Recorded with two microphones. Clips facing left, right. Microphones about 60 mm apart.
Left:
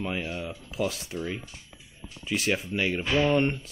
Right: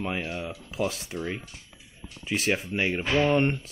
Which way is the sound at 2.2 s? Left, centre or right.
Right.